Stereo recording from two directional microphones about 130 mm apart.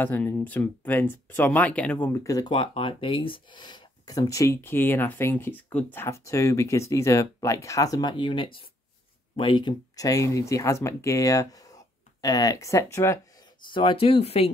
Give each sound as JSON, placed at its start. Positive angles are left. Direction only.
{"t": 0.0, "sound": "speech", "side_deg": 15}
{"t": 2.2, "sound": "speech", "side_deg": 25}
{"t": 2.5, "sound": "speech", "side_deg": 40}
{"t": 13.7, "sound": "speech", "side_deg": 40}